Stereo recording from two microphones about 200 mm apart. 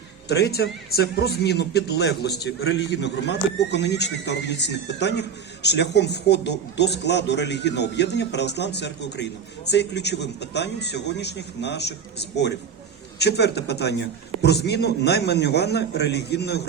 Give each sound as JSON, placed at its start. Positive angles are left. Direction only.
{"t": 0.3, "sound": "speech", "side_deg": 55}
{"t": 2.6, "sound": "speech", "side_deg": 70}